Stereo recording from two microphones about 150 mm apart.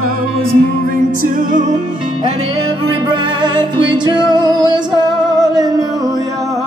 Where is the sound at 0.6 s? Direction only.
75° right (ahead or behind).